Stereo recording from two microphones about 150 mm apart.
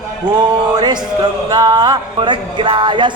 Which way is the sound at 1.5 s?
25° right (ahead or behind).